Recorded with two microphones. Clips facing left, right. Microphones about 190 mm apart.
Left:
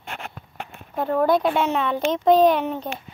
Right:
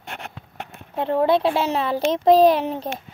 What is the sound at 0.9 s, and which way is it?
Speech, 25° right (ahead or behind).